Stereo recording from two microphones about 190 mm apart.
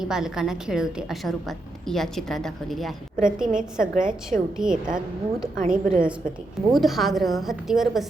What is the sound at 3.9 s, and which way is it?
Speech, 45° right (ahead or behind).